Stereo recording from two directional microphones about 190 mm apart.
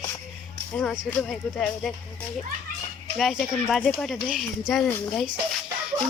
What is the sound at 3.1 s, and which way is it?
Speech, centre (ahead or behind).